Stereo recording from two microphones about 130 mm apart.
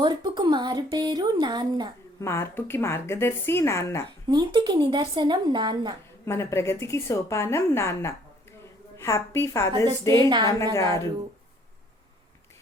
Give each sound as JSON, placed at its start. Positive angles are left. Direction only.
{"t": 0.0, "sound": "speech", "side_deg": -35}
{"t": 2.2, "sound": "a woman's voice", "side_deg": 20}
{"t": 4.3, "sound": "speech", "side_deg": -35}
{"t": 6.2, "sound": "a woman's voice", "side_deg": 20}
{"t": 10.1, "sound": "speech", "side_deg": -35}